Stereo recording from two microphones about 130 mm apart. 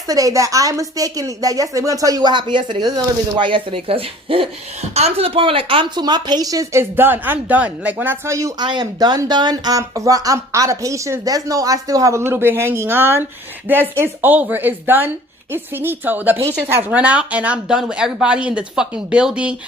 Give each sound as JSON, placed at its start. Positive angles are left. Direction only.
{"t": 0.1, "sound": "speech", "side_deg": -25}
{"t": 8.6, "sound": "speech", "side_deg": -35}